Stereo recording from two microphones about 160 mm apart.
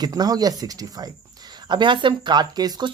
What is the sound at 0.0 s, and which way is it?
Speech, 25° right (ahead or behind).